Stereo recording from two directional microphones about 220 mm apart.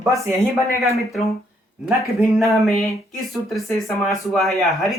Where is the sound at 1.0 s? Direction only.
Centre (ahead or behind).